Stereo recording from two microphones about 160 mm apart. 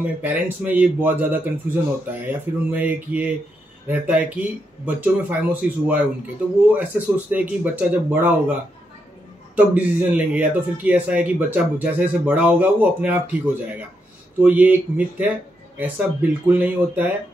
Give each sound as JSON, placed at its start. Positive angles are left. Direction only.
{"t": 0.2, "sound": "a man's voice", "side_deg": -10}
{"t": 9.6, "sound": "a man's voice", "side_deg": -10}